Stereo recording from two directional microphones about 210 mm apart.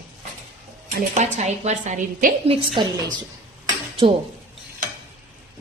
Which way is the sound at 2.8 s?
20° right (ahead or behind).